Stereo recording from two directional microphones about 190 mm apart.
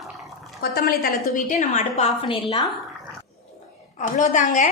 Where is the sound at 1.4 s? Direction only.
40° left (ahead or behind); by 2.6 s 25° left (ahead or behind).